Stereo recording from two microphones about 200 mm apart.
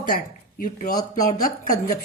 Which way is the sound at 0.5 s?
40° left (ahead or behind).